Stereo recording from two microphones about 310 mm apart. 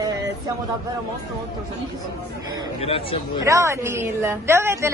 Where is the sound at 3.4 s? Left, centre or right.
Centre.